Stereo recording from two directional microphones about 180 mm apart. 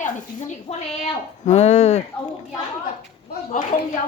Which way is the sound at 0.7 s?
35° left (ahead or behind).